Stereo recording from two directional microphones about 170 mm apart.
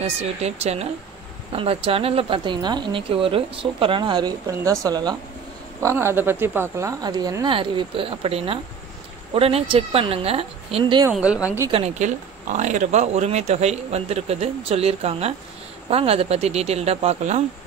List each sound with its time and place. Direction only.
0.0 s a woman's voice: 40° right (ahead or behind)
11.1 s speech: 5° right (ahead or behind)
11.7 s speech: 40° right (ahead or behind)